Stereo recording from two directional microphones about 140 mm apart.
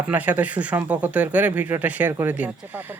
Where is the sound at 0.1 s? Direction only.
10° right (ahead or behind).